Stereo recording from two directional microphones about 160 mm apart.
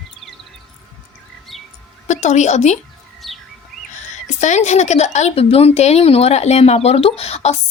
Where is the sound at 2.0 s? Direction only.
45° left (ahead or behind).